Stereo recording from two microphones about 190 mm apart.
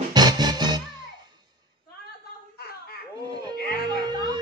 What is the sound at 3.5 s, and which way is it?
Music, 55° left (ahead or behind).